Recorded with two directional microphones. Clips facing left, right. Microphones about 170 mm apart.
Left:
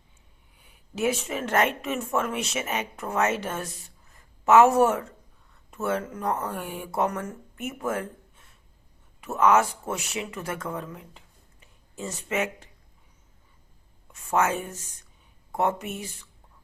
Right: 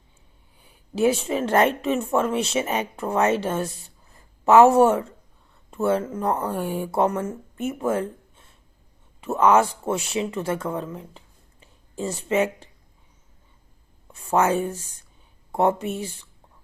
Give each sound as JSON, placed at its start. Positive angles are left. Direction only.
{"t": 0.6, "sound": "a woman's voice", "side_deg": -30}
{"t": 14.1, "sound": "speech", "side_deg": -30}